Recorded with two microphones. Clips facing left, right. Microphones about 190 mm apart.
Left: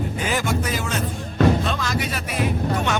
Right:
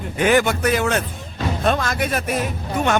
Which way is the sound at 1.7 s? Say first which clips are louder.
Right 5 dB; 55° right (ahead or behind).